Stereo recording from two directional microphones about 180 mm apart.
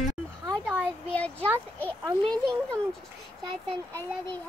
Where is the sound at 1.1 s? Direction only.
10° left (ahead or behind).